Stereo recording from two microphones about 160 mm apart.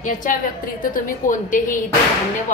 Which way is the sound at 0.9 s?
55° left (ahead or behind).